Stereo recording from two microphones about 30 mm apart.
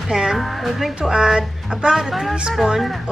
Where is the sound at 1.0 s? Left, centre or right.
Right.